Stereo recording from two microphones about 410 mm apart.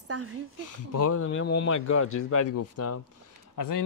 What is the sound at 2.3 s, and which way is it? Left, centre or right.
Speech, left.